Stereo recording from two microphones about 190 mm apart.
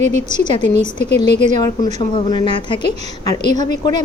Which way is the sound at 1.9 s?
25° left (ahead or behind).